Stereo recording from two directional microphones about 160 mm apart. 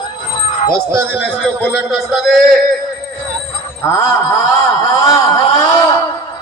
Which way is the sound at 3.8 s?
15° left (ahead or behind).